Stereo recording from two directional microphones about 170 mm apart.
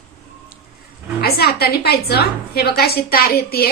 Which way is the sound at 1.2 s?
70° left (ahead or behind).